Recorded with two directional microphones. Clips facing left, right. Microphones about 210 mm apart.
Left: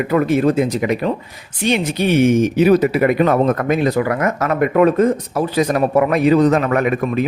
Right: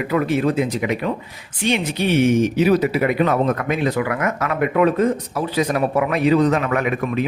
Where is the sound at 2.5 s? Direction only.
50° left (ahead or behind).